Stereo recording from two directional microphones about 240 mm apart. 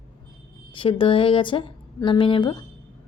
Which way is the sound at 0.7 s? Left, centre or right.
Left.